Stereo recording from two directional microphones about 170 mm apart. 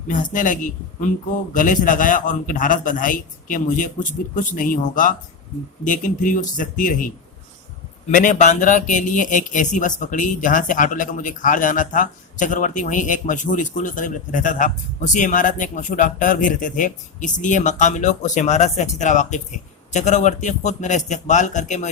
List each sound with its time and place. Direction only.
0.1 s a man's voice: 50° left (ahead or behind)
8.1 s a man's voice: 50° left (ahead or behind)